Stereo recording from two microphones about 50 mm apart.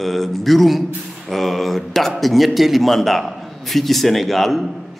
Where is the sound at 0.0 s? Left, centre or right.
Centre.